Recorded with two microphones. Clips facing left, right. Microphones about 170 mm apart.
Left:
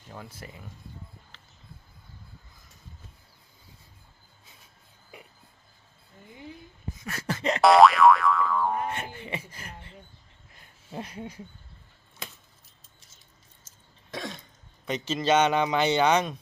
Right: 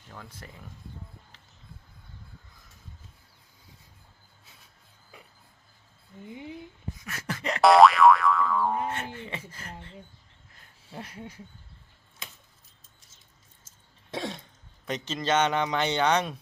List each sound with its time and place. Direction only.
0.1 s speech: 10° left (ahead or behind)
6.3 s speech: 15° right (ahead or behind)
7.0 s beatboxing: 30° left (ahead or behind)
7.6 s boing: centre (ahead or behind)
9.1 s speech: 15° left (ahead or behind)
10.5 s a sound: 15° left (ahead or behind)
14.1 s cough: 30° right (ahead or behind)
14.8 s speech: 5° left (ahead or behind)